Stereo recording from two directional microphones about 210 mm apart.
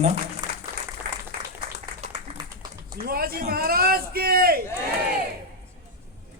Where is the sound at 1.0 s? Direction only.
45° right (ahead or behind).